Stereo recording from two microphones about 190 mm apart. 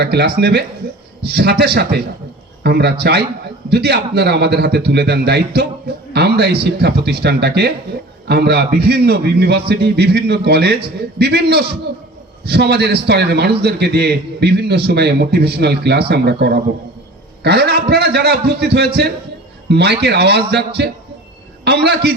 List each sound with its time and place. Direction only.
0.0 s a man's voice: 60° right (ahead or behind)